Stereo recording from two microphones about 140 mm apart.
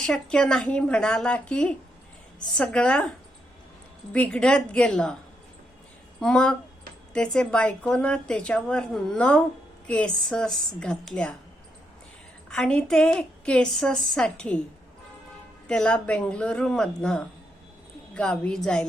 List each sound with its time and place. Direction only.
0.0 s a woman's voice: 5° left (ahead or behind)
4.1 s a woman's voice: 5° left (ahead or behind)
6.1 s a woman's voice: 5° left (ahead or behind)
12.5 s a woman's voice: 5° left (ahead or behind)
15.6 s a woman's voice: 5° left (ahead or behind)